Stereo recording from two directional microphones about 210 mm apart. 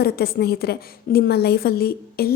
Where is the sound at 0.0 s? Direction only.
50° left (ahead or behind).